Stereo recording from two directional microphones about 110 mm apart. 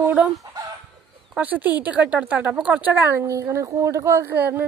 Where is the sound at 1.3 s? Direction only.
15° right (ahead or behind).